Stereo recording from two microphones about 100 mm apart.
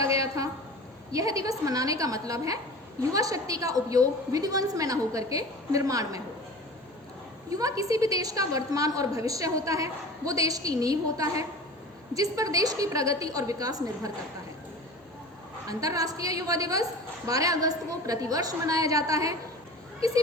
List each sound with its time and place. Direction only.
0.0 s a sound: 35° right (ahead or behind)
1.1 s a woman's voice: 35° right (ahead or behind)
7.5 s a woman's voice: 35° right (ahead or behind)
15.6 s a woman's voice: 35° right (ahead or behind)